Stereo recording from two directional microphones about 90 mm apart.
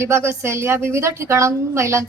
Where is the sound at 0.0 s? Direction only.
30° right (ahead or behind).